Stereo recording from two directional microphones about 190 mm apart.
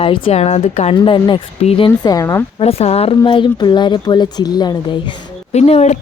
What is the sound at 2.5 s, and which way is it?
Speech, 30° left (ahead or behind).